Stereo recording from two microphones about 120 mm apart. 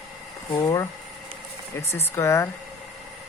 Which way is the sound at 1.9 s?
20° left (ahead or behind).